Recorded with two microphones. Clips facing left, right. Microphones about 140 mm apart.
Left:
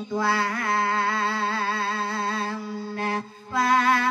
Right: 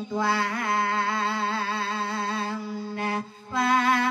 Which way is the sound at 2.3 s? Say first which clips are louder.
Left 1 dB; 20° right (ahead or behind).